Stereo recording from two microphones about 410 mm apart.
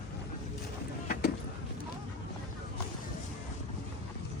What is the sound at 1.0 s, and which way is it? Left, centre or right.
Vehicle, left.